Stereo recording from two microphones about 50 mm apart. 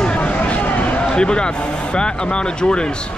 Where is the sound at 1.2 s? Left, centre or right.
Centre.